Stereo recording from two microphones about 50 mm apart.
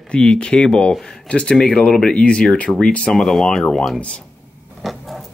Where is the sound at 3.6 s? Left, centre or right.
Centre.